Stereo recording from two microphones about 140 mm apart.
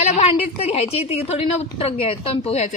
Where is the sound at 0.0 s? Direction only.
50° left (ahead or behind).